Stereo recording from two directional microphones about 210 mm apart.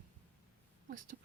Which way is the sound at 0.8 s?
40° right (ahead or behind).